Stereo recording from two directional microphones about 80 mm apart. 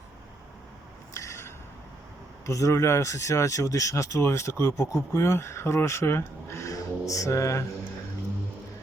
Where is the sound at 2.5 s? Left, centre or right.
Left.